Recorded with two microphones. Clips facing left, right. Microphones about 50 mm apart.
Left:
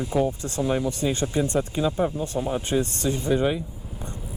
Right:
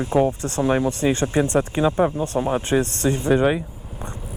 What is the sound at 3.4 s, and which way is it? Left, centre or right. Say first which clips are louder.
Speech: right 5 dB; right.